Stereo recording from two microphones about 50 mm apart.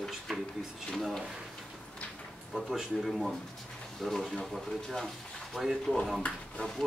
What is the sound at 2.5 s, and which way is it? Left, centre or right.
Speech, centre.